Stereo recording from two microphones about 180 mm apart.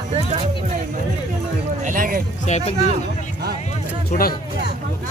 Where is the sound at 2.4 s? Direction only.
40° left (ahead or behind).